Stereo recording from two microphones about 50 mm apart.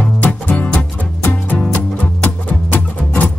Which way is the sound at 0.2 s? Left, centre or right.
Left.